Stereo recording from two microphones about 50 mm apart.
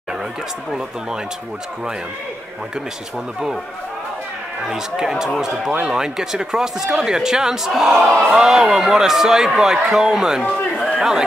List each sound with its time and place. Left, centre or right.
4.6 s speech: centre
10.4 s a sound: left
11.0 s speech: centre